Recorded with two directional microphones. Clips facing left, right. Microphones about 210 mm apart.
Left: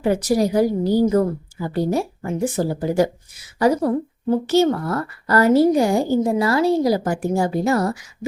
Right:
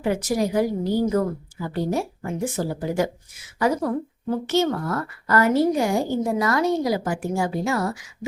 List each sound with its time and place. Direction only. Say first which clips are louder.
0.0 s a woman's voice: left 4 dB; 35° left (ahead or behind)
7.0 s a woman's voice: left 4 dB; 40° left (ahead or behind)